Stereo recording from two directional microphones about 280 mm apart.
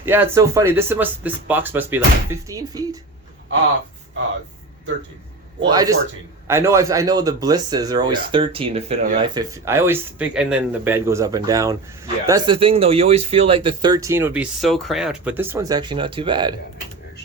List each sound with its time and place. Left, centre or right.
0.0 s speech: centre
5.6 s speech: centre